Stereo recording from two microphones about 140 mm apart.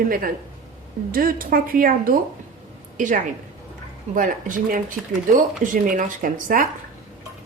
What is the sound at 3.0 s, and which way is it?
A woman's voice, 65° right (ahead or behind).